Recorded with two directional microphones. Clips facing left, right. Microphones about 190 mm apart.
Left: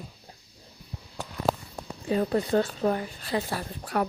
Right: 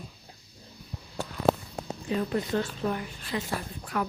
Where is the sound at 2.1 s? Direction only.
35° left (ahead or behind).